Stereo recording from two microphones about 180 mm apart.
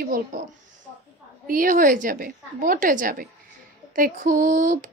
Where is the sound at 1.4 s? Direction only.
50° right (ahead or behind).